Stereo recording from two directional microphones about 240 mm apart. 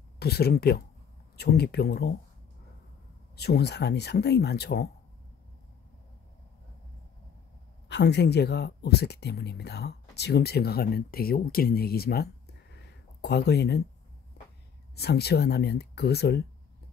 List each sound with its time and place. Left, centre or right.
0.2 s speech: left
3.3 s speech: left
7.9 s speech: left
12.7 s a sound: left
15.0 s speech: left